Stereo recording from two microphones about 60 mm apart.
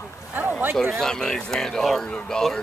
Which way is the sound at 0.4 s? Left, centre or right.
Right.